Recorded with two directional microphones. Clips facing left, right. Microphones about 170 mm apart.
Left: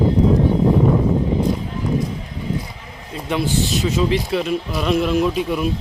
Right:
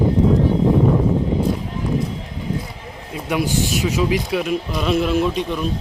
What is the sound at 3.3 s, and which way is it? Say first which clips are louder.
A man's voice: even; 10° right (ahead or behind).